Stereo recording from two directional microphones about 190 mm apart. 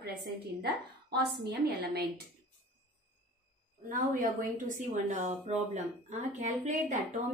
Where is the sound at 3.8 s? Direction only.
45° right (ahead or behind).